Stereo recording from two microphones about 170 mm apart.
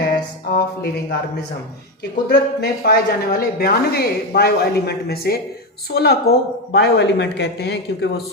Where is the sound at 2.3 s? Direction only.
70° left (ahead or behind).